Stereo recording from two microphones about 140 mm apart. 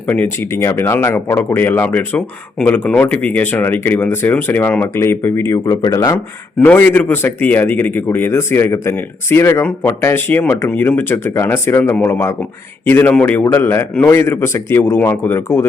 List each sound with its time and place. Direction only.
0.1 s speech: 15° left (ahead or behind)
6.7 s speech: 15° left (ahead or behind)